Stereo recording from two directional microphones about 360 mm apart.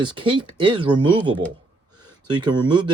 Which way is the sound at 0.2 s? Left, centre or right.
Centre.